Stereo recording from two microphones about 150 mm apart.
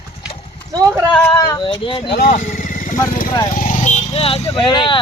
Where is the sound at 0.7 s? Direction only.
20° right (ahead or behind).